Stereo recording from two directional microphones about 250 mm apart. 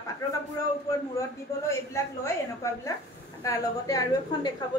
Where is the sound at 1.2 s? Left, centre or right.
Centre.